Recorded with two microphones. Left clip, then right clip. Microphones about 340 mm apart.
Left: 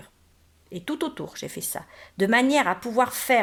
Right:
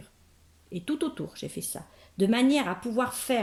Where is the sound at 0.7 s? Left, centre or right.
Centre.